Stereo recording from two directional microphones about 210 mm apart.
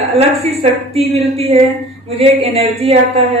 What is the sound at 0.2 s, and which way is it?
Speech, 30° right (ahead or behind).